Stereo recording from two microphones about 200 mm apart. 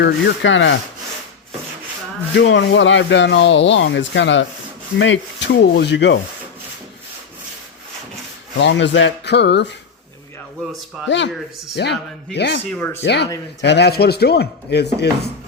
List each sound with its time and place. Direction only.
0.0 s speech: 65° left (ahead or behind)
2.3 s speech: 65° left (ahead or behind)
8.5 s speech: 65° left (ahead or behind)
11.8 s speech: 55° left (ahead or behind)
12.7 s speech: 10° left (ahead or behind)
13.6 s speech: 60° left (ahead or behind)